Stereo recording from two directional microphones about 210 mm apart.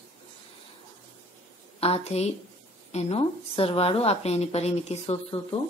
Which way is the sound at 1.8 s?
30° left (ahead or behind).